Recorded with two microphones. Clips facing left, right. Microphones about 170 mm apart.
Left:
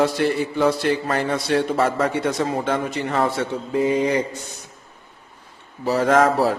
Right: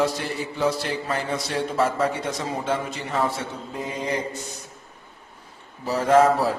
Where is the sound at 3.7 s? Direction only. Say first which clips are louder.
Left 11 dB; 90° left.